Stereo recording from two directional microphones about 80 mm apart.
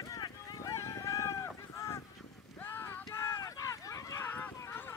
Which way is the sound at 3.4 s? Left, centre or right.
Left.